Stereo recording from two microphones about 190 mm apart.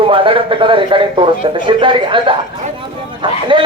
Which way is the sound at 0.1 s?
30° right (ahead or behind).